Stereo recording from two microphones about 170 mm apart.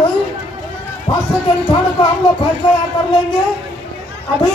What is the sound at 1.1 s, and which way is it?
Speech, 30° left (ahead or behind).